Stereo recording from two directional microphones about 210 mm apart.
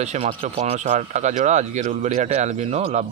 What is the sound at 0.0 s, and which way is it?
Speech, 30° right (ahead or behind).